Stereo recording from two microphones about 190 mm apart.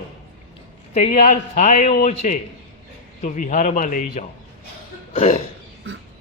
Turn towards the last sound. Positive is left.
turn(degrees=40)  # may be behind; listen again after turning